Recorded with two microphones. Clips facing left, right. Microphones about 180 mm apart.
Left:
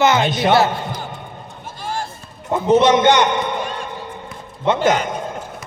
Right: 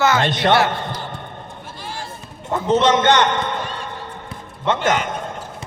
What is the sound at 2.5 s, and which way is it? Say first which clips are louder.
A man's voice: left 3 dB; 10° left (ahead or behind).